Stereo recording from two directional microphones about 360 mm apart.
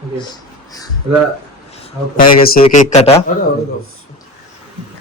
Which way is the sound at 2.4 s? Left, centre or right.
Centre.